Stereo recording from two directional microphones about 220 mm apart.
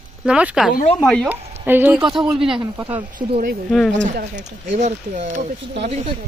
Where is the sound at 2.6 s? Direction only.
15° right (ahead or behind).